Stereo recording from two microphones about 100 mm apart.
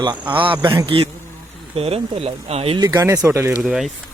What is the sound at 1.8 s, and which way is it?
Speech, 85° right.